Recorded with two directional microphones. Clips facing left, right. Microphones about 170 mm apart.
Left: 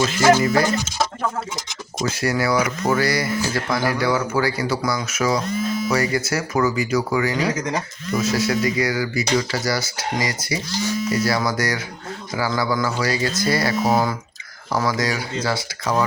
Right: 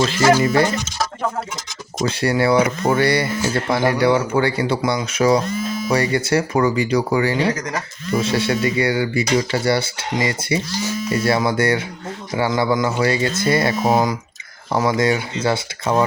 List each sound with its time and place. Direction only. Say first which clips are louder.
2.0 s speech: right 4 dB; 30° right (ahead or behind)